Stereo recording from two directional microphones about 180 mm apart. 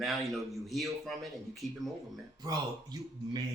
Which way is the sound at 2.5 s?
20° right (ahead or behind).